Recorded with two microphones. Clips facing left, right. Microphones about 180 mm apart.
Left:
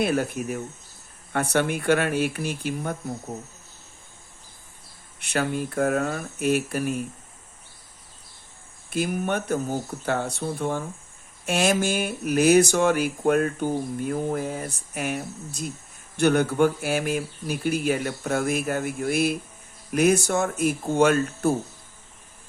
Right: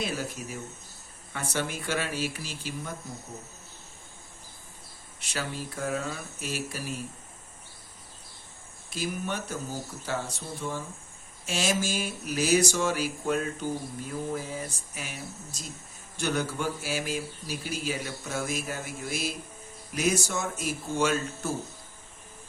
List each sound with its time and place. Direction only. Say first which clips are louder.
0.0 s speech: left 9 dB; 60° left (ahead or behind)
5.2 s speech: left 9 dB; 60° left (ahead or behind)
8.9 s speech: left 7 dB; 55° left (ahead or behind)